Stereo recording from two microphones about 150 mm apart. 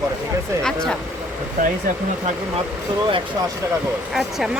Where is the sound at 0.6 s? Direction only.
5° left (ahead or behind).